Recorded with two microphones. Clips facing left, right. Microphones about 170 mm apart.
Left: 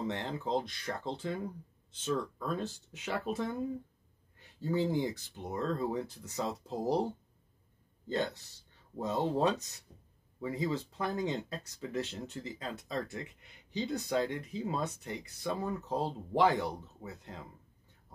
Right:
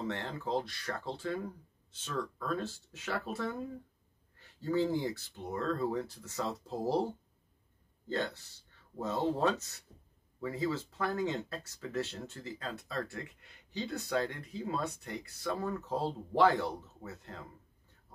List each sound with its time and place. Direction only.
0.0 s speech: 20° left (ahead or behind)
8.1 s speech: 15° left (ahead or behind)